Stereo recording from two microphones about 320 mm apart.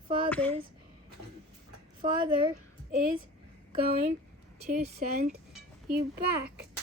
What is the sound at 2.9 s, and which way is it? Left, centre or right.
A child's voice, right.